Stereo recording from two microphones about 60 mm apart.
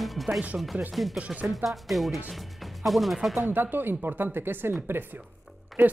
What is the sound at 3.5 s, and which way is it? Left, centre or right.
Speech, right.